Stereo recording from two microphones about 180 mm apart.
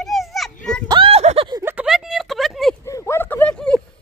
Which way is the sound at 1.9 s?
Centre (ahead or behind).